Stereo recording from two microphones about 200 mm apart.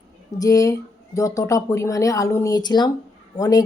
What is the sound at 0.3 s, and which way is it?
A woman's voice, 15° left (ahead or behind).